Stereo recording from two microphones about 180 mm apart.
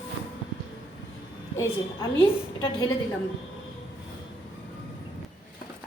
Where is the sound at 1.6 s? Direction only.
15° left (ahead or behind).